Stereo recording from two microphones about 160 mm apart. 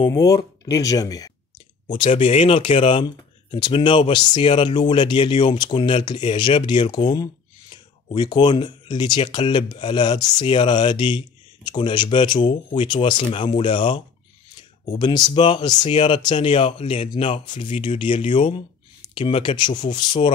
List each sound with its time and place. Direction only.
0.0 s speech: 25° left (ahead or behind)